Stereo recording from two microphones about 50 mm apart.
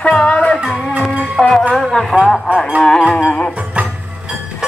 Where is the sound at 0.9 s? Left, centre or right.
Right.